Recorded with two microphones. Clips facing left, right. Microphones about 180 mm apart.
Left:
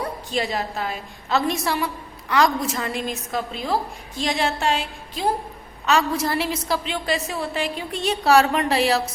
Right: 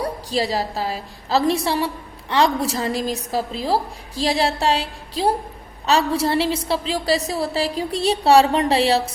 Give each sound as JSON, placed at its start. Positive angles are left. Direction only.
{"t": 0.0, "sound": "a woman's voice", "side_deg": -35}